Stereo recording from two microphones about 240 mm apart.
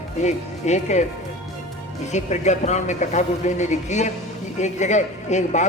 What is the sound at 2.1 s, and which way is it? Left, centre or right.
Speech, left.